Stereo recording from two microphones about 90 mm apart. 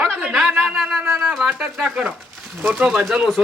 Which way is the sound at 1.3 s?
5° right (ahead or behind).